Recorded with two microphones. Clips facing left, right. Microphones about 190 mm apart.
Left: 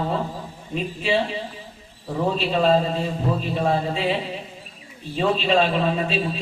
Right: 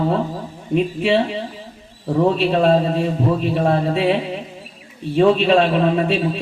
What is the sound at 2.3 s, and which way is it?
A man's voice, 60° right (ahead or behind).